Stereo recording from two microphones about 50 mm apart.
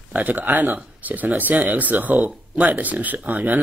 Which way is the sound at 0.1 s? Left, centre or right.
Right.